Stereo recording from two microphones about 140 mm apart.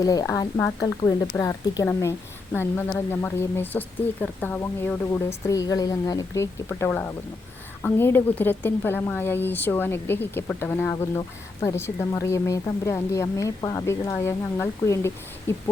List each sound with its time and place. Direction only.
0.0 s a woman's voice: 25° left (ahead or behind)